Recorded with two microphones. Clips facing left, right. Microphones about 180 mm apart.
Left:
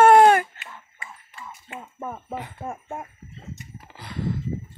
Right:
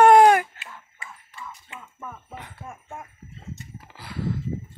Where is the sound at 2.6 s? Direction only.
40° left (ahead or behind).